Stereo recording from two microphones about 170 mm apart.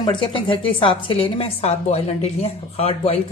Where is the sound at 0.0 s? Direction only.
30° left (ahead or behind).